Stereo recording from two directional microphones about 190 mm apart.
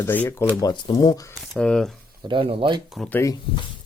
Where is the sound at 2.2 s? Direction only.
25° right (ahead or behind).